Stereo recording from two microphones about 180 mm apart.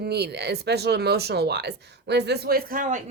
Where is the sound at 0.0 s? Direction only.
65° right (ahead or behind).